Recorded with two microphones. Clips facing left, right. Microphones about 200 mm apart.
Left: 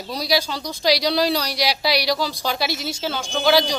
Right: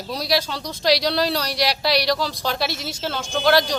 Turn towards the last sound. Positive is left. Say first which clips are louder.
# even
turn(degrees=0)  # may be behind; listen again after turning